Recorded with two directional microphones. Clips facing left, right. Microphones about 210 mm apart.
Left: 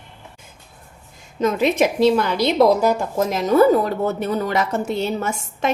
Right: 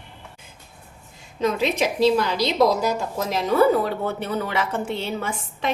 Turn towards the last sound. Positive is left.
turn(degrees=45)  # may be behind; listen again after turning